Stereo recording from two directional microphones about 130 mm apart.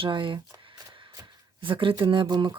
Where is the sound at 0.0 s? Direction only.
40° right (ahead or behind).